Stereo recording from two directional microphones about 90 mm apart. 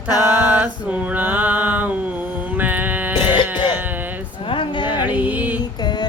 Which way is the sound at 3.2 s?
65° left (ahead or behind).